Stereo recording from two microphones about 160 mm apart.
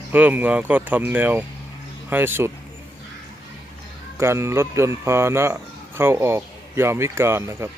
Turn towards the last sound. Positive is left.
turn(degrees=-15)  # may be behind; listen again after turning